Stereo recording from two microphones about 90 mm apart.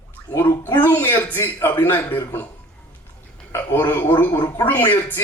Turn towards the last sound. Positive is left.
turn(degrees=20)  # may be behind; listen again after turning